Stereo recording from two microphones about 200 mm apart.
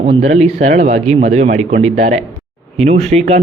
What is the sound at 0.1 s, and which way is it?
Speech, 35° right (ahead or behind).